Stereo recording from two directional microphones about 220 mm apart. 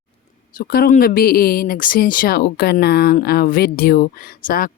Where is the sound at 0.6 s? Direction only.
40° left (ahead or behind).